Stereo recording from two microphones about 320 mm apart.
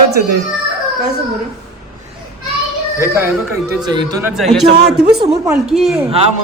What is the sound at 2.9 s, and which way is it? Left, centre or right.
Speech, centre.